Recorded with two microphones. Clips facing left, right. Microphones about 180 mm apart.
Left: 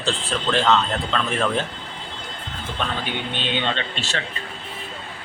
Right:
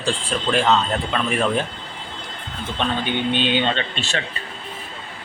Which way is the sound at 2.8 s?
20° right (ahead or behind).